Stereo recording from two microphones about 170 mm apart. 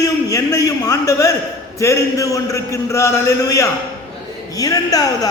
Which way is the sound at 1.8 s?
20° left (ahead or behind).